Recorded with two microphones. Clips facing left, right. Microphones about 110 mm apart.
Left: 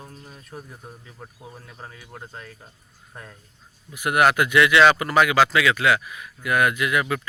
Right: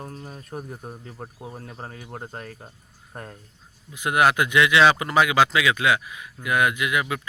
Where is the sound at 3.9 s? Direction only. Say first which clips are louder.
Left 1 dB; 20° right (ahead or behind).